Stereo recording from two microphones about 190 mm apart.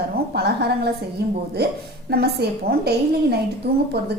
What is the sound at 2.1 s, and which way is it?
A woman's voice, 60° right (ahead or behind).